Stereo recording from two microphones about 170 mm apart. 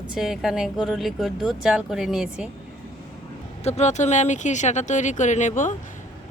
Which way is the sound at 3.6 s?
40° left (ahead or behind).